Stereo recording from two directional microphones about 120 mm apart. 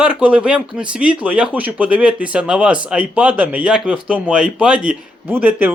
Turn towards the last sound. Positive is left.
turn(degrees=-15)  # may be behind; listen again after turning